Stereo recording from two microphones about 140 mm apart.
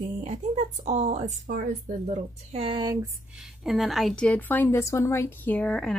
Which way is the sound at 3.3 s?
5° right (ahead or behind).